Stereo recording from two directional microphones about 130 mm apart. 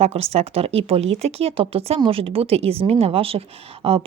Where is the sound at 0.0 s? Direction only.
50° right (ahead or behind).